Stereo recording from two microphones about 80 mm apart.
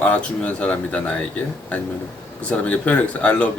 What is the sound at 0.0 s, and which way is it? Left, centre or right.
Speech, centre.